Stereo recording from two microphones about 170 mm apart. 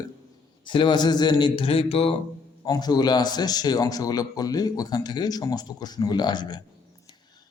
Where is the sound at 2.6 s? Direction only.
25° left (ahead or behind).